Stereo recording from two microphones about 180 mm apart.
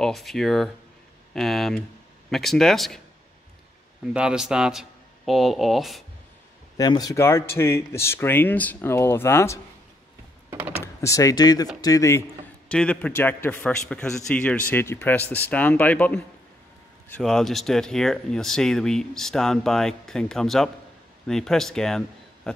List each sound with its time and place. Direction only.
0.0 s speech: centre (ahead or behind)
4.0 s speech: 5° right (ahead or behind)
6.8 s a man's voice: 20° left (ahead or behind)
11.0 s a man's voice: 20° left (ahead or behind)
17.2 s a man's voice: centre (ahead or behind)